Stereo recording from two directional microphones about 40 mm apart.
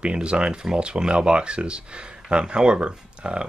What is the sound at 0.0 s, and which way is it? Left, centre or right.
Speech, right.